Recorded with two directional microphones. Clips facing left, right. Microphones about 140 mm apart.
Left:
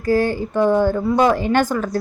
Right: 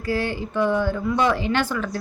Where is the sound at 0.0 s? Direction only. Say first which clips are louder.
Left 7 dB; 45° left (ahead or behind).